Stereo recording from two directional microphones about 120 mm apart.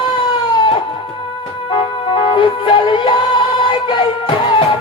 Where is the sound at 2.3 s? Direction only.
40° left (ahead or behind).